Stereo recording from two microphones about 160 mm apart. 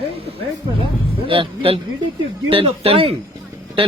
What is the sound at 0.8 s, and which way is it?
A man's voice, 35° right (ahead or behind).